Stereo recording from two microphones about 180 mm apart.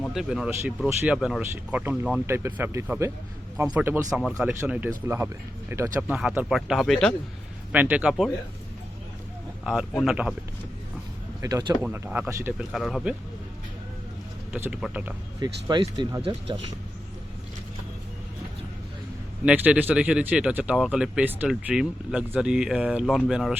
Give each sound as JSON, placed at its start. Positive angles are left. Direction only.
{"t": 0.1, "sound": "speech", "side_deg": 0}
{"t": 7.7, "sound": "speech", "side_deg": -10}
{"t": 9.6, "sound": "speech", "side_deg": 0}
{"t": 11.3, "sound": "speech", "side_deg": -20}
{"t": 12.7, "sound": "speech", "side_deg": 0}
{"t": 14.5, "sound": "speech", "side_deg": -10}
{"t": 15.4, "sound": "speech", "side_deg": -25}
{"t": 19.5, "sound": "speech", "side_deg": -10}